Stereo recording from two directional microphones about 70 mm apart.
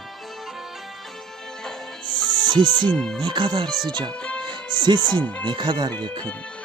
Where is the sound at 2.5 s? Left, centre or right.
Right.